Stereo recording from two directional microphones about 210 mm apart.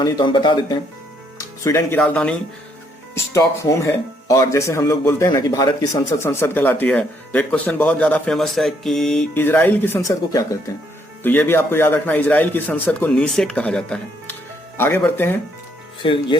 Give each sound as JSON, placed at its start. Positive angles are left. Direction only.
{"t": 0.0, "sound": "speech", "side_deg": 20}
{"t": 16.0, "sound": "speech", "side_deg": 25}